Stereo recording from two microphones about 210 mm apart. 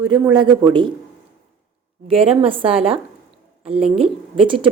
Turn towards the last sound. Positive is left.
turn(degrees=-25)  # may be behind; listen again after turning